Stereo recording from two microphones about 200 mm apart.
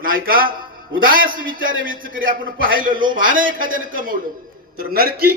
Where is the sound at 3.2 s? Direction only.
45° right (ahead or behind).